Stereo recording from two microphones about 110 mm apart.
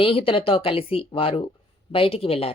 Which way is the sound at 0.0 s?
55° left (ahead or behind).